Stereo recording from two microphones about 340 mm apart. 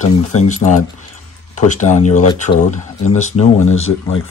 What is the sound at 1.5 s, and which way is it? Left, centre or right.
Speech, left.